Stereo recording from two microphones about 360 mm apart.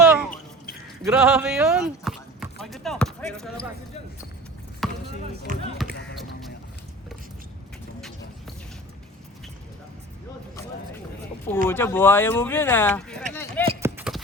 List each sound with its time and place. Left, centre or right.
0.0 s a sound: centre
1.0 s speech: centre
4.8 s basketball bounce: centre
5.5 s speech: right
11.7 s speech: centre
13.7 s a sound: centre